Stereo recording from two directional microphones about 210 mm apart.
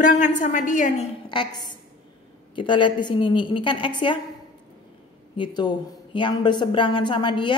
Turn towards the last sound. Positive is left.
turn(degrees=20)  # may be behind; listen again after turning